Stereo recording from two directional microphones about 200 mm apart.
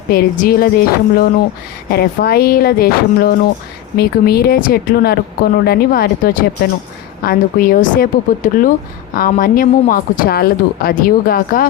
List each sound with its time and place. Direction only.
0.1 s a woman's voice: 50° left (ahead or behind)